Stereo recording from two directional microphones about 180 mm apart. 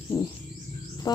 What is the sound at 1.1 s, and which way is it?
Music, 20° left (ahead or behind).